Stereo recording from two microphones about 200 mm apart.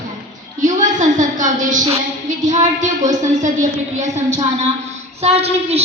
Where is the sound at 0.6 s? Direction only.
40° right (ahead or behind).